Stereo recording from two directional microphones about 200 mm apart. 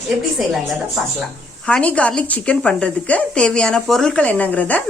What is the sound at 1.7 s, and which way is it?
A woman's voice, 5° left (ahead or behind).